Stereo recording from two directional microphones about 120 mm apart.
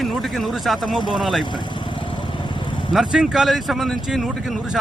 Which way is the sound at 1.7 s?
40° left (ahead or behind).